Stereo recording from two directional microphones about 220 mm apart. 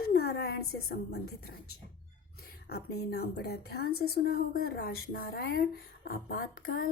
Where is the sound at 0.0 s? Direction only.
45° left (ahead or behind).